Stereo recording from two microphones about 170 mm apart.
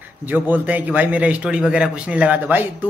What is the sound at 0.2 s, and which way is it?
A man's voice, 10° right (ahead or behind).